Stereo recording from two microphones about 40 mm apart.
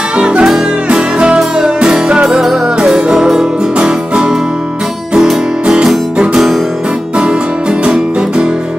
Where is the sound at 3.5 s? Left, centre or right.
Right.